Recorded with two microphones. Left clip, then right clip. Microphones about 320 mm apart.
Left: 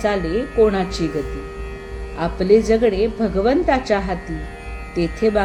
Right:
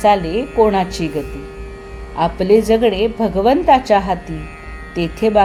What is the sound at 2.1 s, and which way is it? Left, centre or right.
A woman's voice, centre.